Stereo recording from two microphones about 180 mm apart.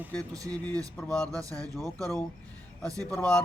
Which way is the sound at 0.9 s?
5° left (ahead or behind).